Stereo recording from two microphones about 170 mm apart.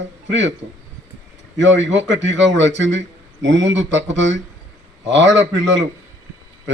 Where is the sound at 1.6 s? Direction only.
90° right.